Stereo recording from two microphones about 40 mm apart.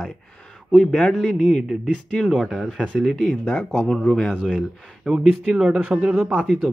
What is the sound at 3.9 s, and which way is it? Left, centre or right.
Speech, centre.